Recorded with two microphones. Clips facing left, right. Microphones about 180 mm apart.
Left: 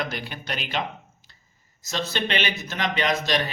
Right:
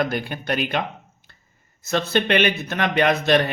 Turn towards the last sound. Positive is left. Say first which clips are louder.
# right 6 dB
turn(degrees=-60)  # may be behind; listen again after turning